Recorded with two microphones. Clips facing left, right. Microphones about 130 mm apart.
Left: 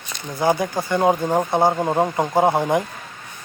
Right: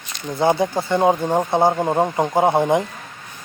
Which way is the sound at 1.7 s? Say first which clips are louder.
Right 1 dB; 5° right (ahead or behind).